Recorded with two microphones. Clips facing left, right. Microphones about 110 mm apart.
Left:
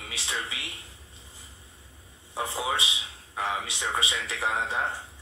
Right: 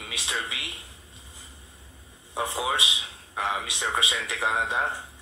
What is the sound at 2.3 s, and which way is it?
A man's voice, 20° right (ahead or behind).